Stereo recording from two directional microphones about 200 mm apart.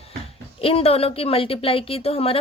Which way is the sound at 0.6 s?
30° left (ahead or behind).